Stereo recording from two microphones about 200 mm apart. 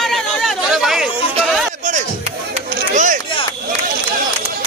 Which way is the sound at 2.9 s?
40° right (ahead or behind).